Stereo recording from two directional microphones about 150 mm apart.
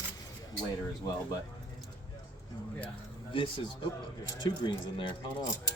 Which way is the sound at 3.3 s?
35° left (ahead or behind).